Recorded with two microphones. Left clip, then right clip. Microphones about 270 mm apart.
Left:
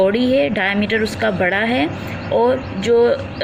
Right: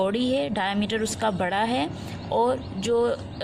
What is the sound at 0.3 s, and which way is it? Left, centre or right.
Speech, right.